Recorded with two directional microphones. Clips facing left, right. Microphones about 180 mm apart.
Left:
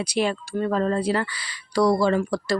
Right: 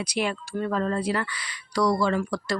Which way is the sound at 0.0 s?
30° left (ahead or behind).